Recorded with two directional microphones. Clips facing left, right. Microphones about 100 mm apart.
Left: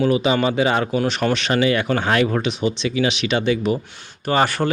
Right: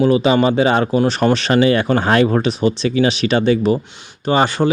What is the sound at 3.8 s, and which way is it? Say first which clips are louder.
Speech: right 4 dB; 20° right (ahead or behind).